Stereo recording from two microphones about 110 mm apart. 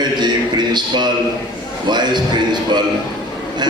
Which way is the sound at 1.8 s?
40° right (ahead or behind).